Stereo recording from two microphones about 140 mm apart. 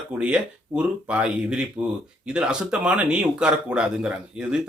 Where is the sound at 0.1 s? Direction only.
5° right (ahead or behind).